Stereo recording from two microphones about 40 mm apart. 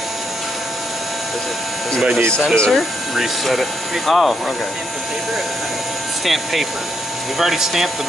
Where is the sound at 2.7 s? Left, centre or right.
Centre.